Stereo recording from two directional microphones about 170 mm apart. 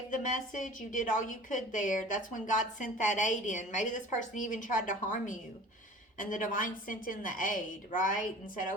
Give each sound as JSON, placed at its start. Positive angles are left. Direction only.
{"t": 0.1, "sound": "a woman's voice", "side_deg": 50}